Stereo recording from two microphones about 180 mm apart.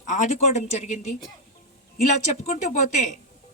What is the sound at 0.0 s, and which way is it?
Speech, 45° left (ahead or behind).